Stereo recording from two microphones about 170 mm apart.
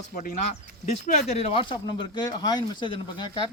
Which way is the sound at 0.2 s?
50° left (ahead or behind).